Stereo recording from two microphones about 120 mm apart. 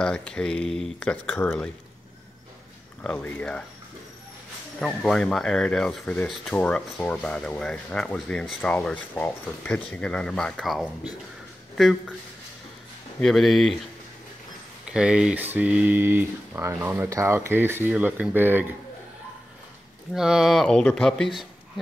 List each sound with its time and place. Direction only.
0.0 s speech: 10° left (ahead or behind)
3.0 s speech: 10° left (ahead or behind)
4.7 s speech: 5° left (ahead or behind)
13.2 s speech: centre (ahead or behind)
14.9 s speech: 10° right (ahead or behind)
20.2 s speech: 5° right (ahead or behind)